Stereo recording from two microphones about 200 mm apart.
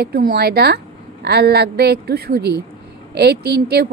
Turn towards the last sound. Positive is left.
turn(degrees=-55)  # may be behind; listen again after turning